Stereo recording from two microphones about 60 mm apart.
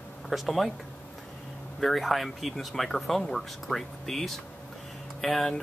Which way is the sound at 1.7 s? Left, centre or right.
Centre.